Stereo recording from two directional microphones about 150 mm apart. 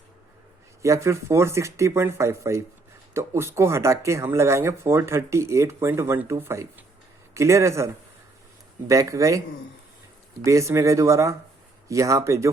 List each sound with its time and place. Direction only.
0.8 s speech: 20° right (ahead or behind)
8.9 s speech: 20° right (ahead or behind)
10.4 s speech: 20° right (ahead or behind)